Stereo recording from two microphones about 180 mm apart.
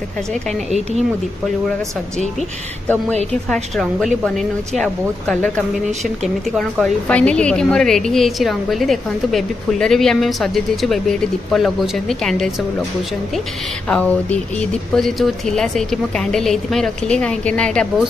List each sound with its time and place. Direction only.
3.4 s a woman's voice: centre (ahead or behind)
13.8 s a woman's voice: 5° left (ahead or behind)